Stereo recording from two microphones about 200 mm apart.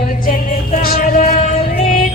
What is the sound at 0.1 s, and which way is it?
Music, 40° left (ahead or behind).